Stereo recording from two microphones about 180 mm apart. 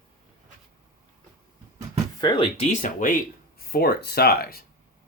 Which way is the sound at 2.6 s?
40° left (ahead or behind).